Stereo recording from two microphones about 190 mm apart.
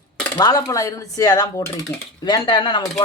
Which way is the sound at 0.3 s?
20° left (ahead or behind).